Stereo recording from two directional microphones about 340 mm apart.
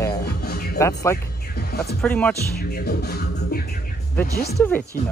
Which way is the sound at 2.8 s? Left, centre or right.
Left.